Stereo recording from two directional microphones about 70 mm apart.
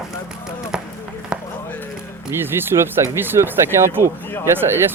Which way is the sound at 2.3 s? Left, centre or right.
Right.